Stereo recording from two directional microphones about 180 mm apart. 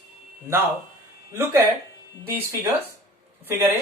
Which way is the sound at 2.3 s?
10° right (ahead or behind).